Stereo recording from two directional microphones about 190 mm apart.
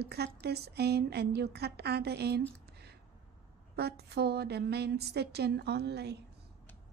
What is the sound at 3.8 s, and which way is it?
A woman's voice, 60° right (ahead or behind).